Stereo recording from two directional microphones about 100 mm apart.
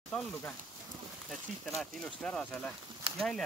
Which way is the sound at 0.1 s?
10° left (ahead or behind).